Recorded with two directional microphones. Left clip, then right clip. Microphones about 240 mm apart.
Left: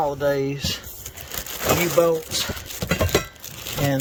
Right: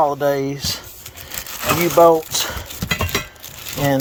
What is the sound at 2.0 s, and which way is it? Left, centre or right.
Speech, centre.